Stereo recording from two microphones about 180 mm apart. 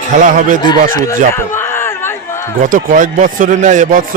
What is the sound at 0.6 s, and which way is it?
Speech, 20° left (ahead or behind).